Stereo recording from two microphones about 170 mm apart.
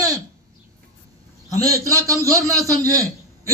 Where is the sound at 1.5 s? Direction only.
20° right (ahead or behind).